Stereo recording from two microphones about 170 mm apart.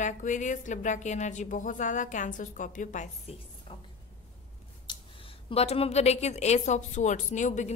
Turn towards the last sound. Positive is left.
turn(degrees=45)  # may be behind; listen again after turning